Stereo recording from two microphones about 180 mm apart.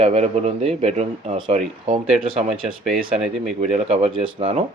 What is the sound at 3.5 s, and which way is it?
Speech, 40° right (ahead or behind).